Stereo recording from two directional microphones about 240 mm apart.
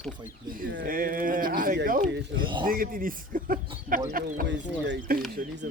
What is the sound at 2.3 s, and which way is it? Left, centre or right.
Speech, centre.